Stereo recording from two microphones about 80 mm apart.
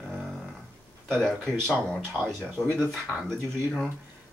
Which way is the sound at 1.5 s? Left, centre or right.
Right.